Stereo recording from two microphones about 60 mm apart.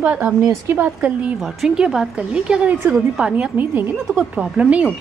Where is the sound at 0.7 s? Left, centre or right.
Right.